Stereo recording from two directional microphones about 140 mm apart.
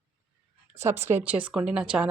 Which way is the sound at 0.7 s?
20° right (ahead or behind).